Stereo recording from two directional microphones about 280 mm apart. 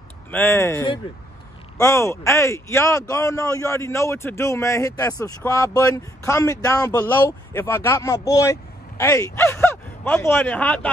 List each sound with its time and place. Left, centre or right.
0.3 s speech: centre